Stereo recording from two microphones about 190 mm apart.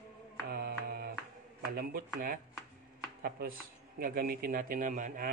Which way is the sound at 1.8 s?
50° right (ahead or behind).